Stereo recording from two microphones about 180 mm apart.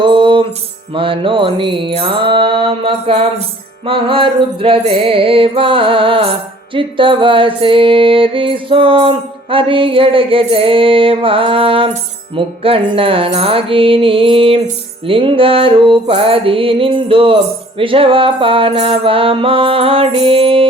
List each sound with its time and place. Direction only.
0.0 s music: 25° right (ahead or behind)